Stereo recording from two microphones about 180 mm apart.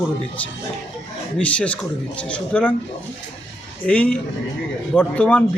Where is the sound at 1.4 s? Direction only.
5° left (ahead or behind).